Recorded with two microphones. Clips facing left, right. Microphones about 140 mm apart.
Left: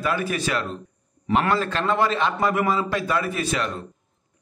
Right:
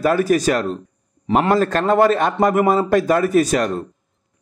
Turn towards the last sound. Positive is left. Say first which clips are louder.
# right 10 dB
turn(degrees=-45)  # may be behind; listen again after turning